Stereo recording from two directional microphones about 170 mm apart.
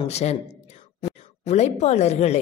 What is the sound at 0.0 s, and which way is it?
Speech, 40° left (ahead or behind).